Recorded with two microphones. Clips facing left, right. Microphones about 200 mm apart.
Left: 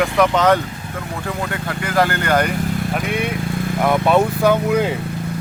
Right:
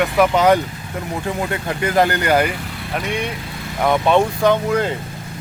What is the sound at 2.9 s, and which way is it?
Speech, 5° left (ahead or behind).